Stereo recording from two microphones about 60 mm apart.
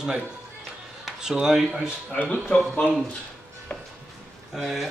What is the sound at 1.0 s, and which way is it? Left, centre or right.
Speech, centre.